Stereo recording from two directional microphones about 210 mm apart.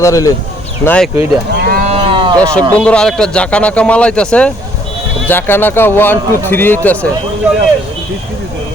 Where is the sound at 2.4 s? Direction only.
5° left (ahead or behind).